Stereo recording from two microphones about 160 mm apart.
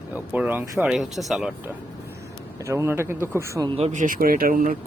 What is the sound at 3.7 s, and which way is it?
Speech, 45° right (ahead or behind).